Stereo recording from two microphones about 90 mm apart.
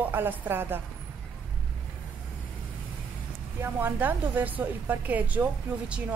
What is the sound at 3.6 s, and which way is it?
A woman's voice, 20° right (ahead or behind).